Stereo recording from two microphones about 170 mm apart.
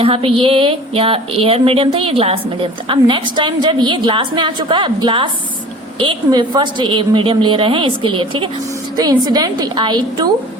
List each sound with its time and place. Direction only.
0.0 s a woman's voice: 35° right (ahead or behind)